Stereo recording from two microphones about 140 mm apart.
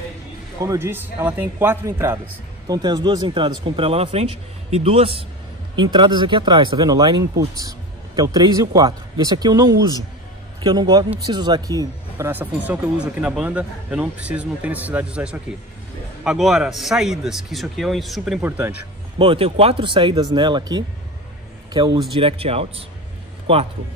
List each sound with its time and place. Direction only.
0.6 s speech: 20° right (ahead or behind)
2.7 s speech: 30° right (ahead or behind)
5.8 s speech: 35° right (ahead or behind)
12.3 s a man's voice: 10° right (ahead or behind)
19.1 s a man's voice: 40° right (ahead or behind)